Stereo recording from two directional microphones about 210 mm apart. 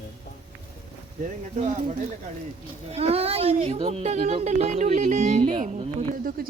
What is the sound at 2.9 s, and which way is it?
Speech, 30° right (ahead or behind).